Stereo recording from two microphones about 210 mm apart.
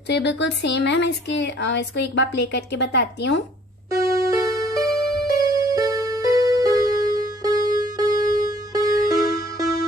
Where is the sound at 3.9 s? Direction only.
15° right (ahead or behind).